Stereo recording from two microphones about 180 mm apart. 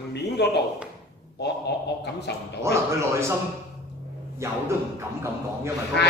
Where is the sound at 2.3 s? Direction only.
70° left (ahead or behind).